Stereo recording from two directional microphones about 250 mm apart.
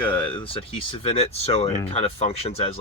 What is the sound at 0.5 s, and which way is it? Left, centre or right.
Speech, left.